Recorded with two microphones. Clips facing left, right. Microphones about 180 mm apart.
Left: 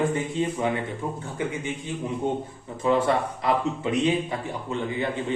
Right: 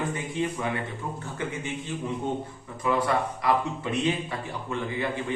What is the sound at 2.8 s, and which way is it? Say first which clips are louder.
Speech: left 3 dB; 25° left (ahead or behind).